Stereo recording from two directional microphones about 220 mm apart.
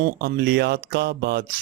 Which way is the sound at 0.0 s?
45° right (ahead or behind).